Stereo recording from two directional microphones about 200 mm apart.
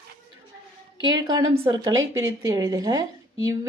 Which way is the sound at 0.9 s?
20° right (ahead or behind).